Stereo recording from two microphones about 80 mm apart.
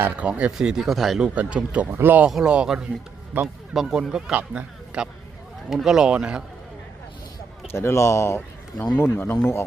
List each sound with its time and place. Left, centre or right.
0.2 s speech: centre
1.4 s speech: centre
2.2 s speech: centre
4.4 s speech: centre
7.7 s a man's voice: left
8.4 s speech: centre
9.0 s speech: left